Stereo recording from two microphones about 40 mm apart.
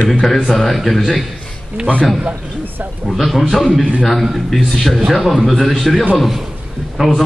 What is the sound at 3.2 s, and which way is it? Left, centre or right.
A man's voice, centre.